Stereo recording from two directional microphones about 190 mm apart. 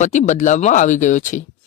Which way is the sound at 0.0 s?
40° left (ahead or behind).